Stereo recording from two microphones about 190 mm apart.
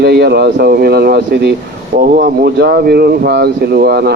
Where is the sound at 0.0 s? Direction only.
60° right (ahead or behind).